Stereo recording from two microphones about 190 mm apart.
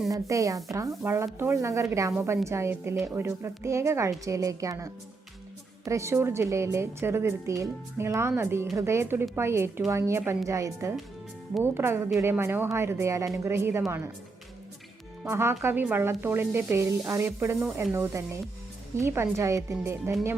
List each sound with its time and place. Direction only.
0.1 s speech: 15° right (ahead or behind)
15.2 s speech: 10° right (ahead or behind)